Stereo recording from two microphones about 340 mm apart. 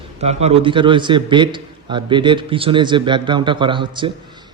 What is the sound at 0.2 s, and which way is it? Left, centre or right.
A man's voice, centre.